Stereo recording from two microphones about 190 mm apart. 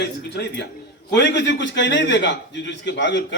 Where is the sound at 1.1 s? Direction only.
65° left (ahead or behind).